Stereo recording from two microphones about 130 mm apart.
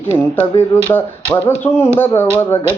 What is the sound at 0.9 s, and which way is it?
Speech, 15° left (ahead or behind).